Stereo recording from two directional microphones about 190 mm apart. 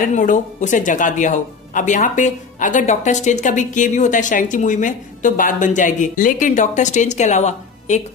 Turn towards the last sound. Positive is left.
turn(degrees=40)  # may be behind; listen again after turning